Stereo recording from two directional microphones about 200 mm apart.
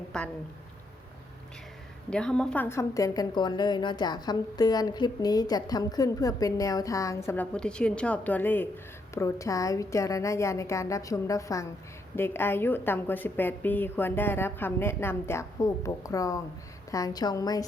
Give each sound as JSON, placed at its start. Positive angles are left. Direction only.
{"t": 0.1, "sound": "speech", "side_deg": 5}
{"t": 2.0, "sound": "a woman's voice", "side_deg": 5}